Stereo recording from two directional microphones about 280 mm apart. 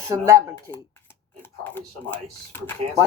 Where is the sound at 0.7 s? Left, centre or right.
Centre.